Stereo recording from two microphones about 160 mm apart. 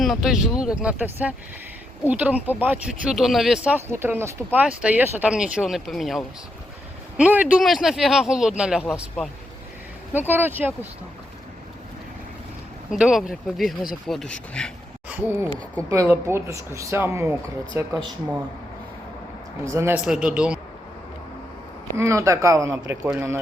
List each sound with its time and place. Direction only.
0.0 s speech: centre (ahead or behind)
10.1 s speech: 10° right (ahead or behind)
12.9 s speech: 5° right (ahead or behind)
15.1 s speech: 15° right (ahead or behind)
19.6 s speech: 15° right (ahead or behind)
20.1 s speech: 5° right (ahead or behind)
21.9 s speech: 20° right (ahead or behind)